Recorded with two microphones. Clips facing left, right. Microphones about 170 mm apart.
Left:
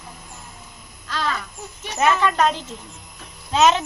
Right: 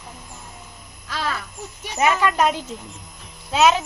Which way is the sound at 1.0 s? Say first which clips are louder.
Left 1 dB; 10° right (ahead or behind).